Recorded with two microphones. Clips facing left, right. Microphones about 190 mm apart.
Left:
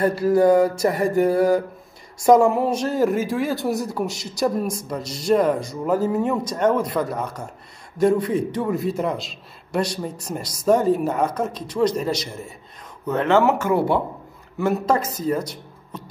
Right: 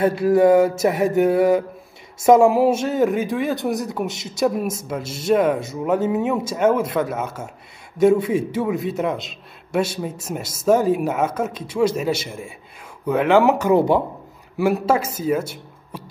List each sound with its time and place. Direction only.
0.0 s a man's voice: centre (ahead or behind)